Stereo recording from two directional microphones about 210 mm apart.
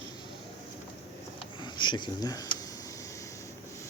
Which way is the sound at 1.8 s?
20° left (ahead or behind).